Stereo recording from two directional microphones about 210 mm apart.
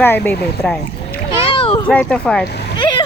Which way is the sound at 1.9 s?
5° left (ahead or behind).